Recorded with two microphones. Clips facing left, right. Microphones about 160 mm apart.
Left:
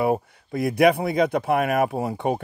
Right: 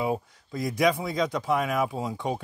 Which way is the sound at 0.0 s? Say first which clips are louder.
Left 6 dB; 60° left (ahead or behind).